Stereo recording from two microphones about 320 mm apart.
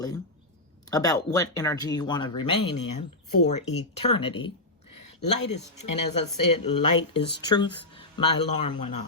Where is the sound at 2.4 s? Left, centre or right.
Left.